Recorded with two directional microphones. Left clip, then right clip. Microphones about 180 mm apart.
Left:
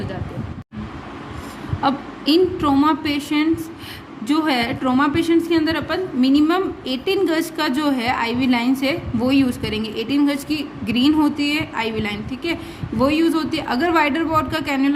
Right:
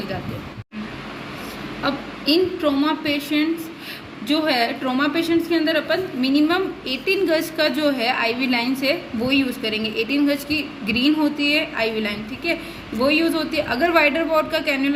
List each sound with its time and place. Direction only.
1.8 s a woman's voice: 55° left (ahead or behind)